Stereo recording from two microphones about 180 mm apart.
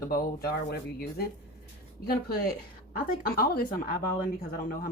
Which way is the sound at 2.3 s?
60° left (ahead or behind).